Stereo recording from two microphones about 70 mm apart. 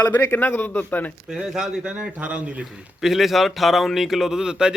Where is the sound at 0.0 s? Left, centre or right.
Left.